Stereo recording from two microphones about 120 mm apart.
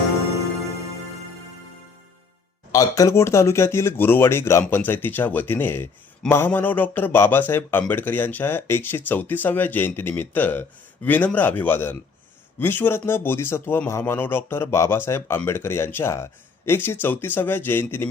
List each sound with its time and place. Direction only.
2.7 s a man's voice: 30° left (ahead or behind)